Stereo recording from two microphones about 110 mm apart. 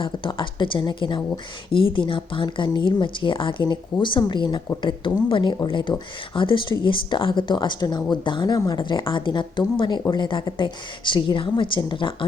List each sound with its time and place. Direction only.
0.0 s speech: 50° left (ahead or behind)